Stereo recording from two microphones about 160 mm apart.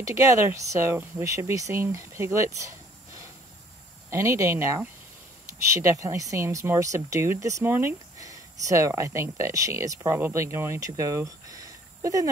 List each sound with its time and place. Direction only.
0.0 s speech: 20° right (ahead or behind)
4.1 s speech: 15° right (ahead or behind)